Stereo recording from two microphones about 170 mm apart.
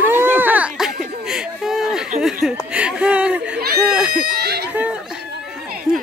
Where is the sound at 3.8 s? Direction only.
5° right (ahead or behind).